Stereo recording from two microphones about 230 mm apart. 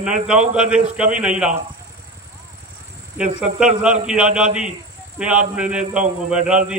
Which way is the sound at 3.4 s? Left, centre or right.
Centre.